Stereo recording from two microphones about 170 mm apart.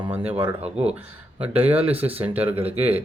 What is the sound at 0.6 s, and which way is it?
Speech, 35° right (ahead or behind).